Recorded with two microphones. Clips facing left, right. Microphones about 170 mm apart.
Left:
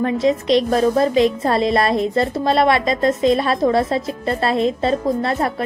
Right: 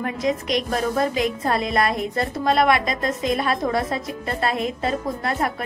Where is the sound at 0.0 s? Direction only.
25° left (ahead or behind).